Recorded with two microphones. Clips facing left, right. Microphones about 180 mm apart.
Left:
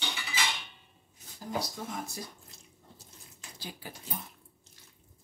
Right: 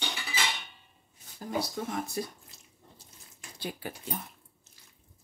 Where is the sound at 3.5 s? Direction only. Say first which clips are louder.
Right 7 dB; 60° right (ahead or behind).